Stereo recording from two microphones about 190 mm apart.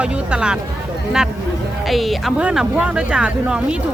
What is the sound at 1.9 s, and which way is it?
Speech, centre (ahead or behind).